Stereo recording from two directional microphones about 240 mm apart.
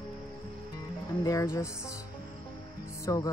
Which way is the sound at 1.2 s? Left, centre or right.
Centre.